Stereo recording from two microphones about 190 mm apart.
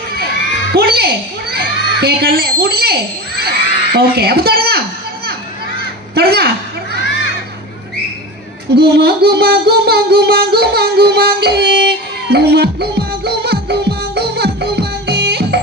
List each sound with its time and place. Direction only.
0.7 s a child's voice: 55° right (ahead or behind)
6.1 s a sound: 55° right (ahead or behind)
8.7 s music: 60° right (ahead or behind)